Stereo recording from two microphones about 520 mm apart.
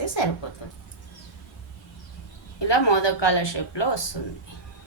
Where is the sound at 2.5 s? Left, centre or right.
Left.